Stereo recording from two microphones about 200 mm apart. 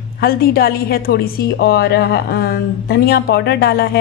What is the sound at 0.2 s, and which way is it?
A woman's voice, 50° left (ahead or behind).